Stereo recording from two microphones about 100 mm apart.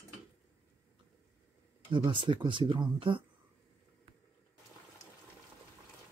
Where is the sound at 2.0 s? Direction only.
55° right (ahead or behind).